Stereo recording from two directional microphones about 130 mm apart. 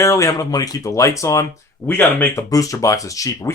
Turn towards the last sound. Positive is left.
turn(degrees=25)  # may be behind; listen again after turning